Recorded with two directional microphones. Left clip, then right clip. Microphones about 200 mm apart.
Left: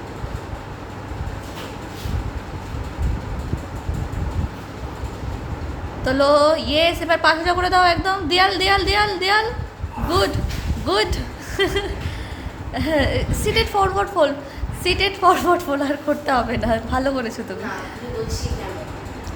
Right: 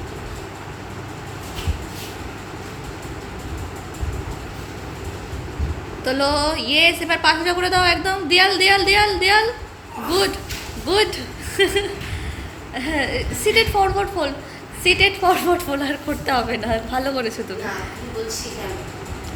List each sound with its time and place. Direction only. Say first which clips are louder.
6.1 s a woman's voice: left 5 dB; 20° left (ahead or behind)